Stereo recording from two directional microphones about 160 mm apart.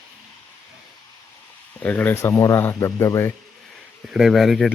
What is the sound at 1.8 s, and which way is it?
Speech, 10° left (ahead or behind).